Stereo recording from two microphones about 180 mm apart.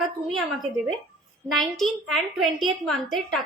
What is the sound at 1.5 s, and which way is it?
A child's voice, centre (ahead or behind).